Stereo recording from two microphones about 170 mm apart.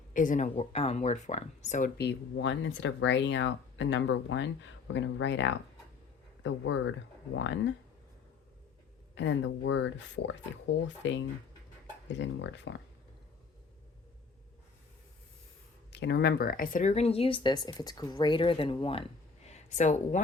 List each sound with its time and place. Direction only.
0.1 s speech: 50° left (ahead or behind)
2.0 s speech: 85° left
9.1 s speech: 90° left
15.9 s speech: 80° left; by 19.0 s 35° left (ahead or behind)
19.5 s speech: 45° left (ahead or behind)